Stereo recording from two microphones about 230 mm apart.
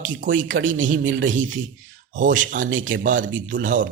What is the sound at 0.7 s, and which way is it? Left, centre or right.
Speech, right.